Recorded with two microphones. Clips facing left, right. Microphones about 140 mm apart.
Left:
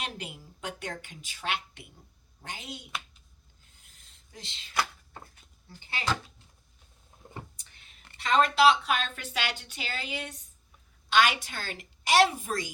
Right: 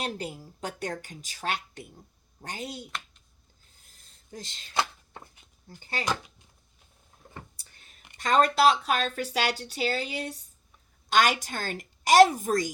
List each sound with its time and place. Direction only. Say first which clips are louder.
0.0 s speech: right 5 dB; 40° right (ahead or behind)
3.8 s a sound: right 1 dB; 35° right (ahead or behind)
4.7 s chopping: right 2 dB; 25° right (ahead or behind)
5.6 s speech: right 4 dB; 40° right (ahead or behind)
7.2 s a sound: left 2 dB; 20° left (ahead or behind)
8.2 s a woman's voice: right 1 dB; 40° right (ahead or behind)